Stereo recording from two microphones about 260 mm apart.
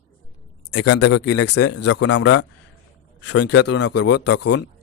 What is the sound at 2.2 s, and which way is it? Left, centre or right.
A man's voice, left.